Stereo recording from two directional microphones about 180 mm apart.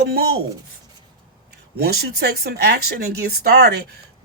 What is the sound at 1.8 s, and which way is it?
Speech, 65° right (ahead or behind).